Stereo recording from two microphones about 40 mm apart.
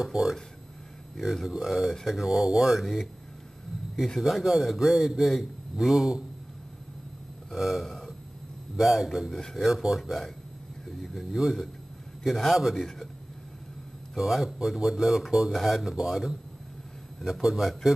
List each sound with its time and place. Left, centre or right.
0.0 s a man's voice: centre
2.8 s a man's voice: centre
4.2 s a man's voice: centre
7.5 s a man's voice: centre
7.8 s a sound: centre
8.7 s a man's voice: centre
10.9 s a sound: centre
11.3 s a man's voice: centre
14.1 s speech: centre